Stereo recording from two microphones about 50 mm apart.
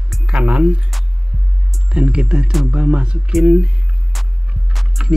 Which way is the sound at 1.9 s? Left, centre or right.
Centre.